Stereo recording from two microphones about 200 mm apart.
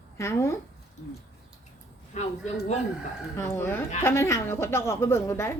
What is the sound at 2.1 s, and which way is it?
Speech, 35° left (ahead or behind).